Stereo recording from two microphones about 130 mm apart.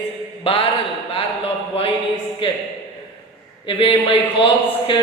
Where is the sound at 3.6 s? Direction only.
40° left (ahead or behind).